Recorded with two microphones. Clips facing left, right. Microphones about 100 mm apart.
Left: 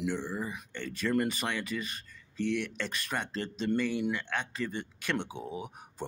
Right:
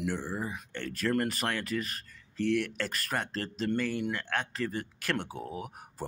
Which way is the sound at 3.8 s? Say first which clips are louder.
Left 1 dB; 10° left (ahead or behind).